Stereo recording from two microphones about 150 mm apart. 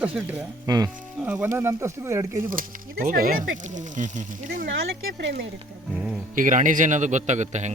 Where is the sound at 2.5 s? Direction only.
70° right (ahead or behind).